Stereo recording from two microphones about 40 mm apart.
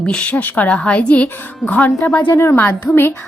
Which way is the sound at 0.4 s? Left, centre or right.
Left.